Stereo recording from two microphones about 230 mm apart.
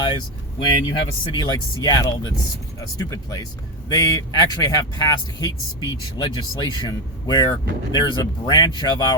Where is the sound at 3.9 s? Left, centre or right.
Centre.